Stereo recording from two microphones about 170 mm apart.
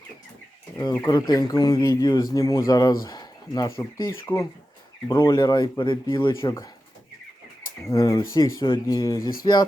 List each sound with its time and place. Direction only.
1.0 s speech: 25° left (ahead or behind)
3.0 s a sound: 20° left (ahead or behind)
3.8 s speech: 20° left (ahead or behind)
7.9 s speech: 20° left (ahead or behind)